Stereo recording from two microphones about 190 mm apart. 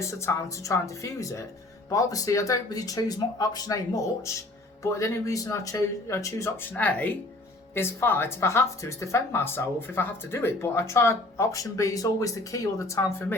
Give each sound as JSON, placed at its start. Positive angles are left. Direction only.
{"t": 0.0, "sound": "speech", "side_deg": 15}